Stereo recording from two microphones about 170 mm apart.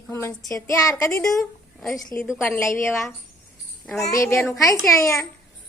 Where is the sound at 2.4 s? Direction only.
15° left (ahead or behind).